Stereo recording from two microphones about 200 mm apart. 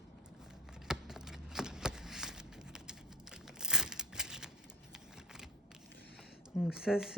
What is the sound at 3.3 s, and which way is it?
Crumpling, 5° right (ahead or behind).